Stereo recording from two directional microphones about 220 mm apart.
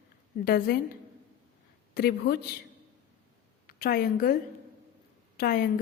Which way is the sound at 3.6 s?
45° left (ahead or behind).